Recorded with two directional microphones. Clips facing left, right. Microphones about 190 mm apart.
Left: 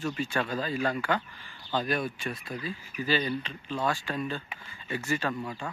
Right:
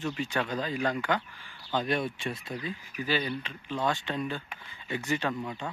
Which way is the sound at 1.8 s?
25° right (ahead or behind).